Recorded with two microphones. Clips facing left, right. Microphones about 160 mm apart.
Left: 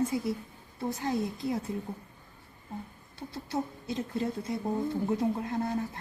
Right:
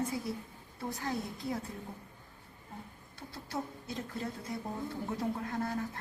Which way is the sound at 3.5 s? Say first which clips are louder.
Left 5 dB; 20° left (ahead or behind).